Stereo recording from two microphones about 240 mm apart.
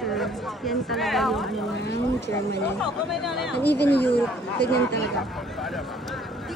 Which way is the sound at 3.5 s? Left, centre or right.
Left.